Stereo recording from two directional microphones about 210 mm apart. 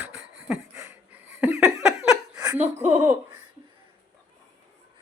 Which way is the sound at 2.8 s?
5° right (ahead or behind).